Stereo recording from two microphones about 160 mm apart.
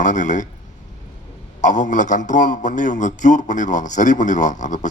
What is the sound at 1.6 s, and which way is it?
A man's voice, 50° left (ahead or behind).